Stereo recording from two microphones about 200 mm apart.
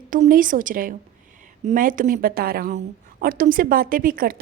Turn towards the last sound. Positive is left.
turn(degrees=-45)  # may be behind; listen again after turning